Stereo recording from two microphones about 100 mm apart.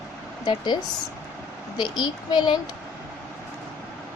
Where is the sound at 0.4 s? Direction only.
50° left (ahead or behind).